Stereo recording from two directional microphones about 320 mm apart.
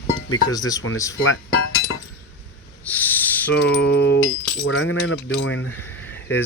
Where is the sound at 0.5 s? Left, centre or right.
Centre.